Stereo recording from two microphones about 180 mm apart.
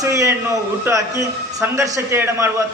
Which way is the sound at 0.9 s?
15° right (ahead or behind).